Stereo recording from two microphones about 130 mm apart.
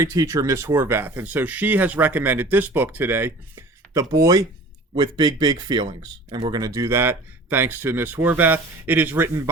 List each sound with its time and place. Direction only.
0.0 s speech: 25° right (ahead or behind)